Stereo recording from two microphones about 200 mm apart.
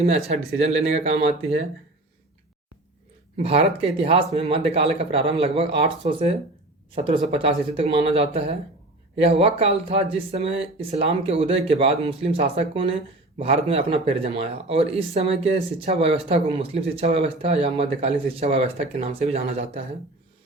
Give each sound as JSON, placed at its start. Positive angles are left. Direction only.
{"t": 0.3, "sound": "speech", "side_deg": -30}
{"t": 3.3, "sound": "a man's voice", "side_deg": -30}